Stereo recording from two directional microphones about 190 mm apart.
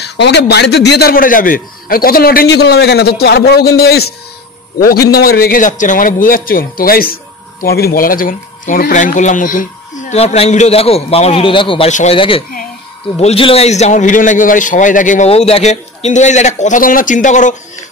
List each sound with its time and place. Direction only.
0.0 s a man's voice: 60° left (ahead or behind); by 17.6 s 40° left (ahead or behind)